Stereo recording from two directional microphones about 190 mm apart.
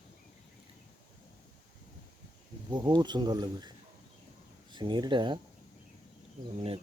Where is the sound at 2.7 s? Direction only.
20° right (ahead or behind).